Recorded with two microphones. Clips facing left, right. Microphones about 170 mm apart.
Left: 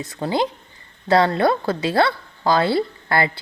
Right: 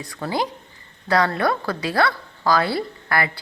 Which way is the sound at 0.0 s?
25° left (ahead or behind).